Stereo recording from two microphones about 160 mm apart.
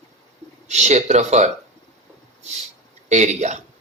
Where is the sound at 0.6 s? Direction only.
45° right (ahead or behind).